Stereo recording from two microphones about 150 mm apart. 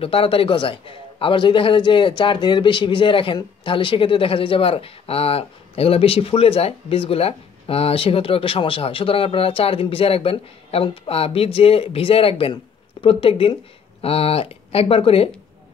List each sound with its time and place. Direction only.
0.0 s a man's voice: 40° left (ahead or behind)